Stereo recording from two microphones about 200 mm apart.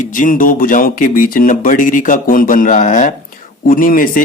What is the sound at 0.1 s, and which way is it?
Speech, 40° left (ahead or behind).